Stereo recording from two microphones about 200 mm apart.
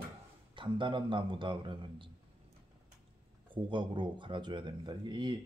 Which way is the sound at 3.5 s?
25° right (ahead or behind).